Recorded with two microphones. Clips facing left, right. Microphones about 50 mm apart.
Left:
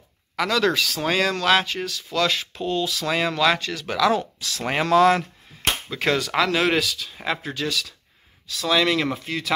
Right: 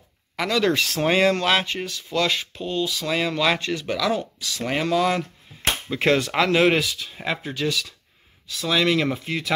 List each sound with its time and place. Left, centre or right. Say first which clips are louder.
0.4 s speech: left 1 dB; centre
0.7 s speech: right 1 dB; right
1.0 s speech: right 2 dB; centre
3.5 s speech: right 2 dB; centre
3.8 s speech: left 3 dB; centre
5.9 s speech: right 2 dB; right
7.2 s speech: even; centre